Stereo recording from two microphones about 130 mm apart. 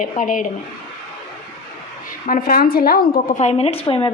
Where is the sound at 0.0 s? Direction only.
85° left.